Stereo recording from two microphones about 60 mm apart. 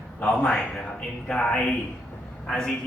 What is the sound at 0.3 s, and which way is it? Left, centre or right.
Speech, centre.